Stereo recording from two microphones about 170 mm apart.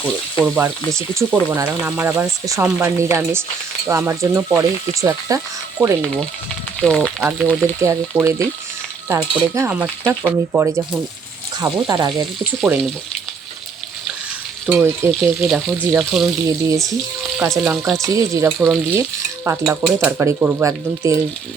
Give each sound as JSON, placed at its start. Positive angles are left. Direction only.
{"t": 0.4, "sound": "speech", "side_deg": -10}
{"t": 6.7, "sound": "speech", "side_deg": 5}
{"t": 7.2, "sound": "speech", "side_deg": -10}
{"t": 7.4, "sound": "speech", "side_deg": 0}
{"t": 7.8, "sound": "speech", "side_deg": -15}
{"t": 11.6, "sound": "frying", "side_deg": -20}
{"t": 12.5, "sound": "speech", "side_deg": 0}
{"t": 14.7, "sound": "speech", "side_deg": -10}
{"t": 17.3, "sound": "frying", "side_deg": -5}
{"t": 18.0, "sound": "frying", "side_deg": -20}
{"t": 19.5, "sound": "speech", "side_deg": -15}